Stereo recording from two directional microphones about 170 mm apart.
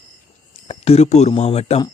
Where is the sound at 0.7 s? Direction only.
40° left (ahead or behind).